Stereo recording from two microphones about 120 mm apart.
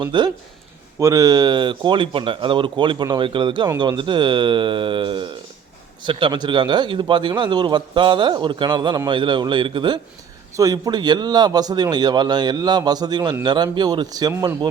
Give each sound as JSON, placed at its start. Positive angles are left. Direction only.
{"t": 0.0, "sound": "a man's voice", "side_deg": -40}
{"t": 0.9, "sound": "a man's voice", "side_deg": -25}
{"t": 10.6, "sound": "a man's voice", "side_deg": -30}